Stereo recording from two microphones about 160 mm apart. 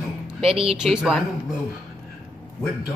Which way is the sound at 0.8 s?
5° right (ahead or behind).